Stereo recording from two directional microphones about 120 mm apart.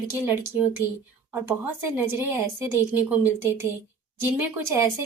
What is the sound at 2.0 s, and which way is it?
A woman's voice, 20° right (ahead or behind).